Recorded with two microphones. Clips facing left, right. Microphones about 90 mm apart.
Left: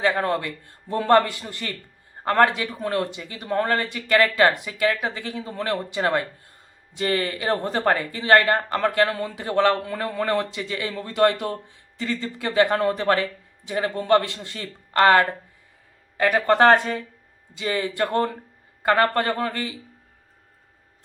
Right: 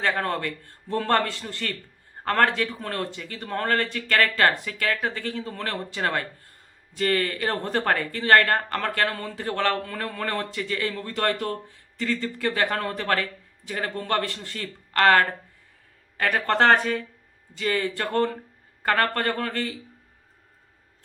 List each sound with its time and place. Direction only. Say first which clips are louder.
0.0 s speech: left 3 dB; 15° left (ahead or behind)